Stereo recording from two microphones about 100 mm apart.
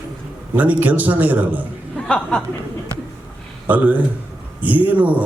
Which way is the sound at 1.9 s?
10° left (ahead or behind).